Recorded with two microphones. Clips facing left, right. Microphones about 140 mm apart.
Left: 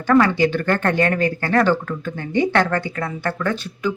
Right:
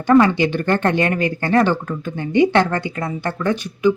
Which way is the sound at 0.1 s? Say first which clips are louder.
Right 2 dB; 20° right (ahead or behind).